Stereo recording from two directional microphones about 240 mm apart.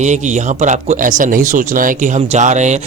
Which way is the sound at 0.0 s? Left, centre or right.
Right.